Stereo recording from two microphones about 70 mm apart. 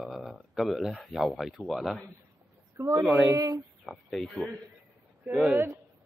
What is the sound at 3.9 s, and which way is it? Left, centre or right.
Speech, centre.